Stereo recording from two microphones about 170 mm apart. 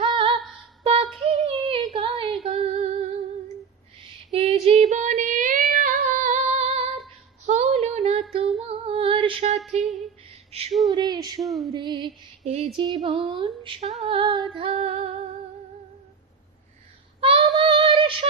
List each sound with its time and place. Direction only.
0.0 s music: 30° right (ahead or behind)
0.9 s female singing: 35° right (ahead or behind)
4.3 s female singing: 35° right (ahead or behind)
10.5 s a sound: 35° right (ahead or behind)
10.9 s a sound: 25° right (ahead or behind)
11.4 s female singing: centre (ahead or behind)
11.7 s female singing: 25° right (ahead or behind)
17.2 s child singing: 35° right (ahead or behind)
17.6 s female singing: 30° right (ahead or behind)